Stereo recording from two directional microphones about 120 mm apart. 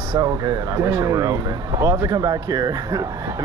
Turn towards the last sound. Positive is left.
turn(degrees=-30)  # may be behind; listen again after turning